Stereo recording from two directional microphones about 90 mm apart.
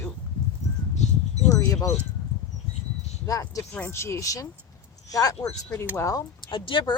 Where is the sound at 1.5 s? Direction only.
45° left (ahead or behind).